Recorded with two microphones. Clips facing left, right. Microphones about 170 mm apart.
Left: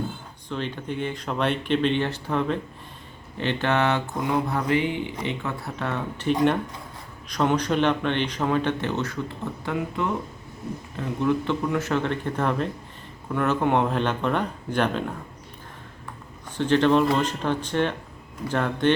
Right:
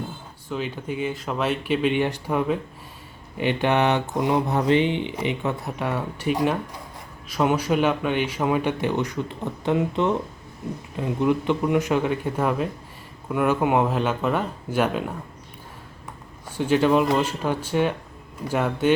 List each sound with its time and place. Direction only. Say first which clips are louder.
0.4 s a man's voice: right 1 dB; 5° right (ahead or behind)
16.6 s a man's voice: even; 10° right (ahead or behind)